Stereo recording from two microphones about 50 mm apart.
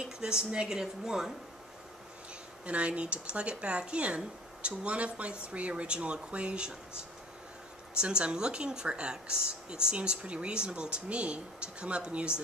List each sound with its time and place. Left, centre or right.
0.2 s a woman's voice: centre
2.6 s speech: right
8.0 s speech: centre